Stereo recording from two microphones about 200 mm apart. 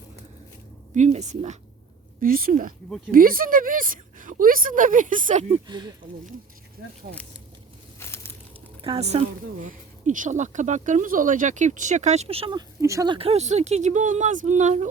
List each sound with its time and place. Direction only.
0.9 s a woman's voice: 35° right (ahead or behind)
2.2 s speech: 45° right (ahead or behind)
5.6 s speech: 20° right (ahead or behind)
7.9 s a sound: 10° left (ahead or behind)
8.8 s a woman's voice: 30° right (ahead or behind)
13.1 s a woman's voice: 30° right (ahead or behind)